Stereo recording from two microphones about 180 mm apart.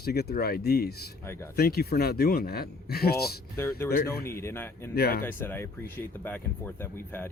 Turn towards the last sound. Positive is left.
turn(degrees=10)  # may be behind; listen again after turning